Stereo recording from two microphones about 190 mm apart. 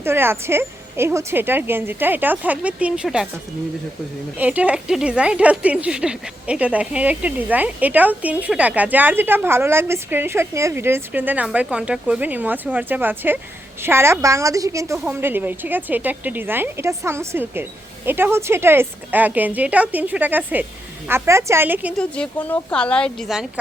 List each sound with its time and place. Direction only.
0.0 s speech: 10° right (ahead or behind)
4.4 s speech: 5° right (ahead or behind)
21.9 s a woman's voice: 5° left (ahead or behind)